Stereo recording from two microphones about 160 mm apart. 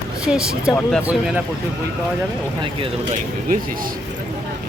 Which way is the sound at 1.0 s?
5° right (ahead or behind).